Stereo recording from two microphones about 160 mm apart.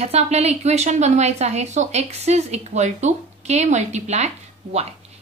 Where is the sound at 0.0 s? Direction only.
40° right (ahead or behind).